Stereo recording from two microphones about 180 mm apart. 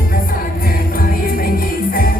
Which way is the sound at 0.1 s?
55° left (ahead or behind).